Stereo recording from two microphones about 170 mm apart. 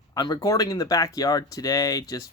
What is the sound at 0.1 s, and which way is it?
Speech, 20° left (ahead or behind).